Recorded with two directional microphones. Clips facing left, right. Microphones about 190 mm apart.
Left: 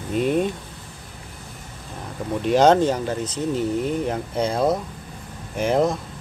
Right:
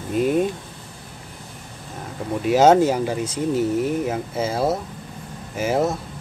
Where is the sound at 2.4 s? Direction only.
5° right (ahead or behind).